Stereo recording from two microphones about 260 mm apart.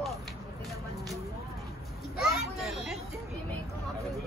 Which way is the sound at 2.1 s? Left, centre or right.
Centre.